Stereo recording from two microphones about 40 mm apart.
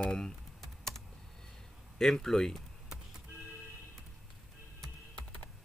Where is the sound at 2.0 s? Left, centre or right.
Centre.